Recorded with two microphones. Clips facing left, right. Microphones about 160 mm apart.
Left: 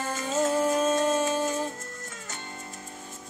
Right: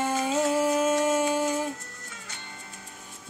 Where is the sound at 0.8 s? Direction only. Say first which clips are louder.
Right 1 dB; 10° right (ahead or behind).